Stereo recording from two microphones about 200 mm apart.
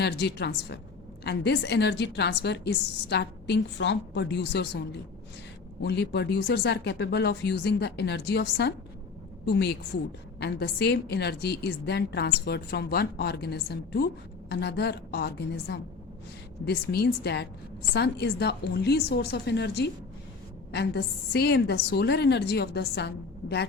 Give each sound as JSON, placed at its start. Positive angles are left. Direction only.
{"t": 0.0, "sound": "a woman's voice", "side_deg": 55}